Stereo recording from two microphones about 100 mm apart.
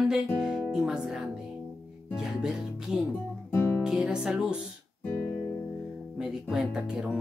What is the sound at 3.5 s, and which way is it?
Music, 20° left (ahead or behind).